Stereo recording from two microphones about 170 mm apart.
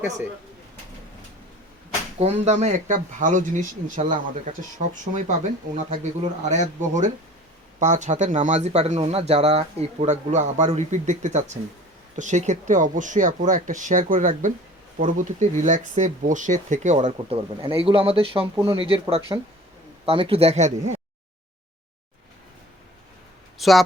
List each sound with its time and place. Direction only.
2.1 s speech: 40° right (ahead or behind)
23.6 s speech: centre (ahead or behind)